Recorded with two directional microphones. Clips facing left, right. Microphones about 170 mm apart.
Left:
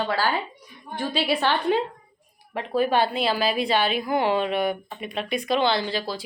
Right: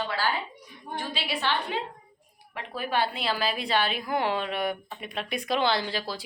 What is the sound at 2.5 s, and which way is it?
A woman's voice, 30° left (ahead or behind).